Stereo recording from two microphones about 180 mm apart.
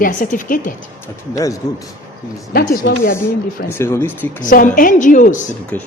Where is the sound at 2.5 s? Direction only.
55° left (ahead or behind).